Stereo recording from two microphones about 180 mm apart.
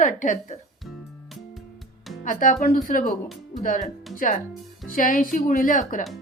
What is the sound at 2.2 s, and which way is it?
Speech, 50° left (ahead or behind).